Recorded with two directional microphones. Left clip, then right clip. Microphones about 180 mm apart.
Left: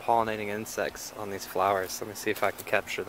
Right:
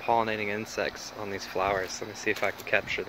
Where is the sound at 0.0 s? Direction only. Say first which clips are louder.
Even; 10° left (ahead or behind).